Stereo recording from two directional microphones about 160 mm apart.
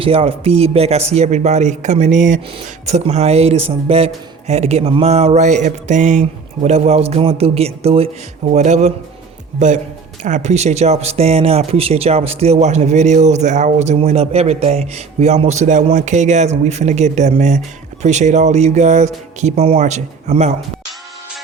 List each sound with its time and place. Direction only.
0.0 s speech: 35° right (ahead or behind)